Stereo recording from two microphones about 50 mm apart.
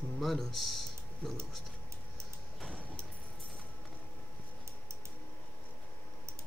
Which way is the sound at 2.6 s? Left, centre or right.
Centre.